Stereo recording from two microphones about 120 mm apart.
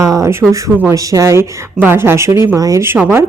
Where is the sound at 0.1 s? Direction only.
25° right (ahead or behind).